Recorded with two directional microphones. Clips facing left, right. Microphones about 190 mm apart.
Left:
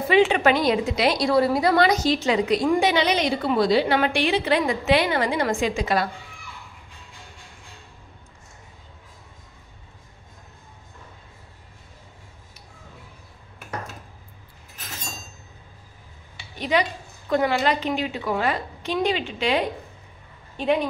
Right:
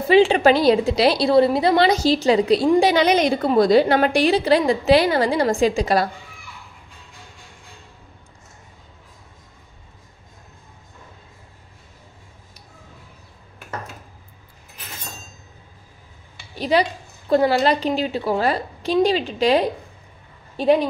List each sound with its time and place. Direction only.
0.1 s a woman's voice: 30° right (ahead or behind)
16.5 s a sound: 35° right (ahead or behind)
17.3 s a woman's voice: 35° right (ahead or behind)